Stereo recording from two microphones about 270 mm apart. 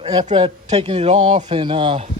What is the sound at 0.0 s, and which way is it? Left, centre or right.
A man's voice, centre.